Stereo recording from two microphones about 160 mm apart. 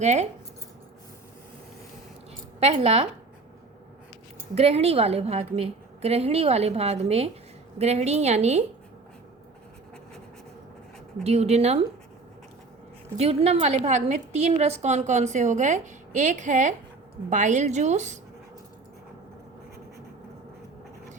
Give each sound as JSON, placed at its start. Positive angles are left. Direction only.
{"t": 0.0, "sound": "a woman's voice", "side_deg": -45}
{"t": 2.6, "sound": "a woman's voice", "side_deg": -40}
{"t": 4.5, "sound": "a woman's voice", "side_deg": -40}
{"t": 11.2, "sound": "a woman's voice", "side_deg": -40}
{"t": 13.1, "sound": "a woman's voice", "side_deg": -40}